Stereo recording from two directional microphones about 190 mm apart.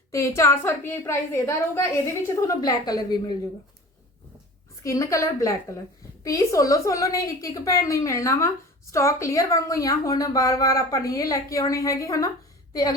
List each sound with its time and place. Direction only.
0.1 s a woman's voice: 15° left (ahead or behind)
4.8 s a woman's voice: 15° left (ahead or behind)